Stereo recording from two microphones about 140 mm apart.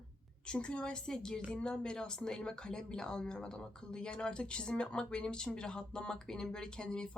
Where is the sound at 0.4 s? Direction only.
10° left (ahead or behind).